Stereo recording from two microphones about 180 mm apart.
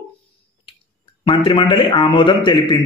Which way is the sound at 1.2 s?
30° left (ahead or behind).